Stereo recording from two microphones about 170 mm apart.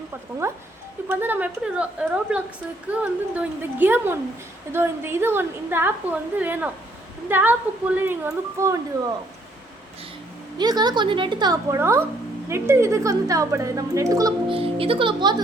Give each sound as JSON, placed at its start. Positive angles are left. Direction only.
{"t": 1.0, "sound": "a woman's voice", "side_deg": -10}
{"t": 10.6, "sound": "a woman's voice", "side_deg": -25}
{"t": 14.5, "sound": "speech", "side_deg": -35}